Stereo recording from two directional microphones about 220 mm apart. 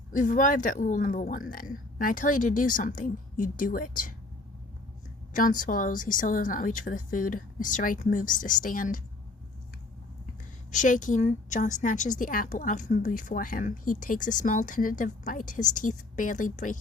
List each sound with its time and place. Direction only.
0.1 s speech: 35° left (ahead or behind)
5.3 s speech: 35° left (ahead or behind)
10.7 s speech: 35° left (ahead or behind)